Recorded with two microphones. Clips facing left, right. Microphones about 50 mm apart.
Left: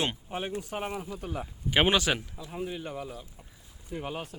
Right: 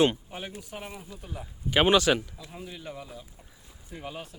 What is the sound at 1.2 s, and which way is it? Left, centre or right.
Speech, left.